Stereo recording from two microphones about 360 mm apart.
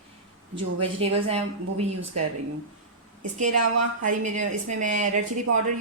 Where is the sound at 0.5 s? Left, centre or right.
Centre.